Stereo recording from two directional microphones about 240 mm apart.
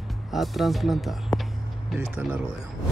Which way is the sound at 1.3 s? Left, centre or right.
Centre.